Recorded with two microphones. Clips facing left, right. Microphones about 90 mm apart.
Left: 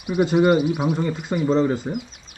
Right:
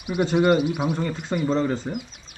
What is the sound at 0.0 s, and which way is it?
Speech, centre (ahead or behind).